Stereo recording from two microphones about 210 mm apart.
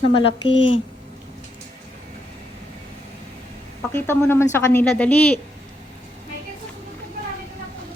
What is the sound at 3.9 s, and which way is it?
Speech, 10° left (ahead or behind).